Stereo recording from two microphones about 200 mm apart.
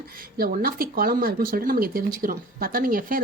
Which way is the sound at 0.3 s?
45° right (ahead or behind).